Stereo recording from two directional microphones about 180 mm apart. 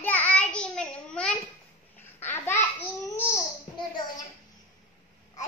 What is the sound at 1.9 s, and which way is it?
Babbling, 10° left (ahead or behind).